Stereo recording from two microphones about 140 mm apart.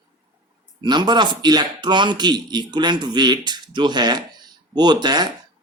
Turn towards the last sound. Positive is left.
turn(degrees=-30)  # may be behind; listen again after turning